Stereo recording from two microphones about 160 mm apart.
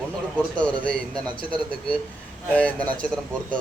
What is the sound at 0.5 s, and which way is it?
Speech, 5° left (ahead or behind).